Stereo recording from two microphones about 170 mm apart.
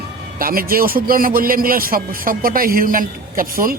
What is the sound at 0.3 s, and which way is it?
A man's voice, 60° right (ahead or behind).